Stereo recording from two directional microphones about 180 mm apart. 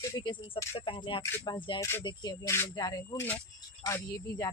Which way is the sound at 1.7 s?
15° left (ahead or behind).